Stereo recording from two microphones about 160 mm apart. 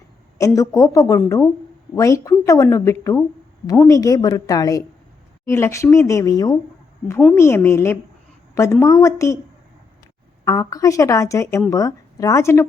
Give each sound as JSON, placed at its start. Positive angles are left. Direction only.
{"t": 0.3, "sound": "a woman's voice", "side_deg": 20}
{"t": 10.4, "sound": "a woman's voice", "side_deg": 20}